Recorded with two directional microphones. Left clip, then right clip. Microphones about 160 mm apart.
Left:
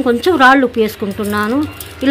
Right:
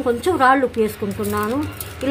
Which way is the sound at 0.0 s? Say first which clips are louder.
Left 6 dB; 35° left (ahead or behind).